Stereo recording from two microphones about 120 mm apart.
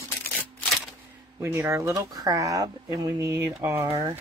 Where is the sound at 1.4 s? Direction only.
20° right (ahead or behind).